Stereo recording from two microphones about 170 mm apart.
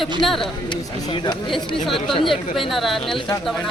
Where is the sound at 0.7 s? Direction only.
25° left (ahead or behind).